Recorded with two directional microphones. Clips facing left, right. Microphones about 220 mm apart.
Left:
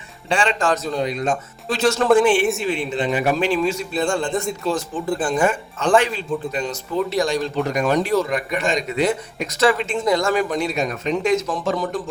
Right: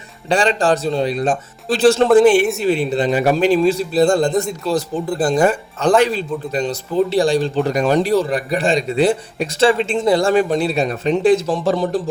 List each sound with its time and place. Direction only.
0.3 s speech: 35° right (ahead or behind)